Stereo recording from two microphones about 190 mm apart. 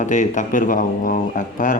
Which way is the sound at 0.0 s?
40° left (ahead or behind).